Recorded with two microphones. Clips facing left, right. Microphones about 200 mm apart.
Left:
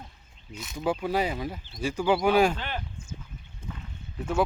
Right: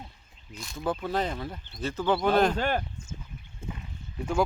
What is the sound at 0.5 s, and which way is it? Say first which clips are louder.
Speech: left 2 dB; 5° left (ahead or behind).